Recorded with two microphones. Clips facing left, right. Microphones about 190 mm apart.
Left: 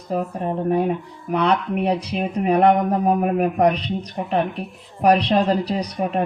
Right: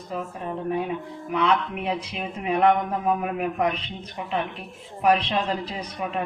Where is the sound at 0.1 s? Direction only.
40° left (ahead or behind).